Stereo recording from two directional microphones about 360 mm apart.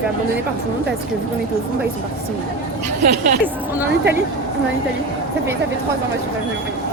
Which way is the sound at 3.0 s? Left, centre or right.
Right.